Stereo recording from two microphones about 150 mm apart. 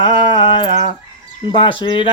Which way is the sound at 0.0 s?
35° left (ahead or behind).